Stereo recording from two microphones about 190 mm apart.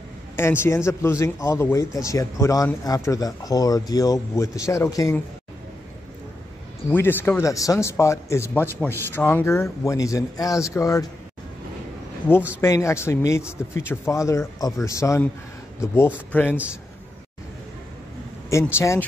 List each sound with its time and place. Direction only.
0.4 s a man's voice: 10° left (ahead or behind)
6.9 s a man's voice: 10° left (ahead or behind)
12.5 s a man's voice: 15° left (ahead or behind)
18.5 s a man's voice: 15° left (ahead or behind)